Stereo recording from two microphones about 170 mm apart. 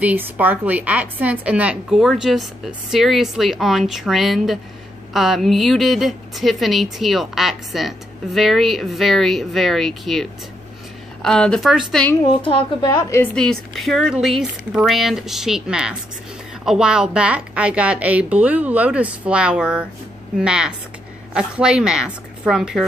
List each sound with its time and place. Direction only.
0.0 s a woman's voice: 10° right (ahead or behind); by 12.2 s 5° left (ahead or behind)
12.4 s speech: 30° left (ahead or behind)
13.2 s a woman's voice: 5° left (ahead or behind)